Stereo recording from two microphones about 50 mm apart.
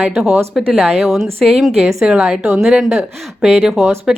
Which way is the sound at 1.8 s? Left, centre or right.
Centre.